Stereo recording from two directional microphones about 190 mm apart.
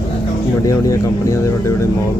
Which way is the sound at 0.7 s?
15° left (ahead or behind).